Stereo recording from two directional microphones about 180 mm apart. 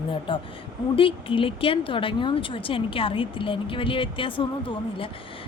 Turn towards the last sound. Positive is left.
turn(degrees=30)  # may be behind; listen again after turning